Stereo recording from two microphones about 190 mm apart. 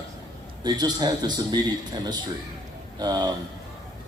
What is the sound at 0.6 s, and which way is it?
A man's voice, 20° right (ahead or behind).